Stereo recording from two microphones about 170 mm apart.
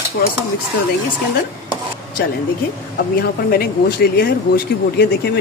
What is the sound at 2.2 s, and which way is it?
Speech, 65° left (ahead or behind).